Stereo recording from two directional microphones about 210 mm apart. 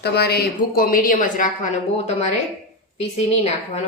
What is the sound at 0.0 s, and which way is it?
Speech, 50° left (ahead or behind).